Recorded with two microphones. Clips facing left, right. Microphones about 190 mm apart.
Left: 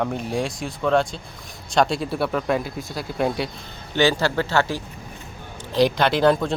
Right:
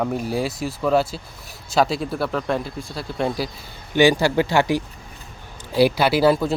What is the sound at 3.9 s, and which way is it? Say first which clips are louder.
Speech: right 4 dB; 15° right (ahead or behind).